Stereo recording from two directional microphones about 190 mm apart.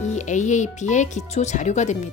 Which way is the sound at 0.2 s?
40° left (ahead or behind).